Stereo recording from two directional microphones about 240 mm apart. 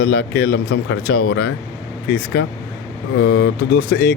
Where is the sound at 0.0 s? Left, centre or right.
Left.